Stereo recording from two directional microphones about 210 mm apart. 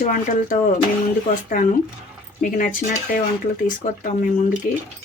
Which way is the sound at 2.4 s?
40° left (ahead or behind).